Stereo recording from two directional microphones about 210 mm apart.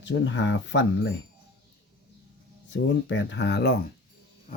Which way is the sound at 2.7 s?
60° left (ahead or behind).